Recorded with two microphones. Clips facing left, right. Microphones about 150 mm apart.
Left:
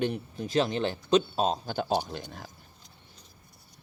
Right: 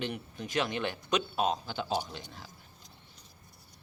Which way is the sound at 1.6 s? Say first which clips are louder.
Left 5 dB; 45° left (ahead or behind).